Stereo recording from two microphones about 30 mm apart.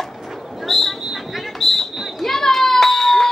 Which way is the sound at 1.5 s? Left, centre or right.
Centre.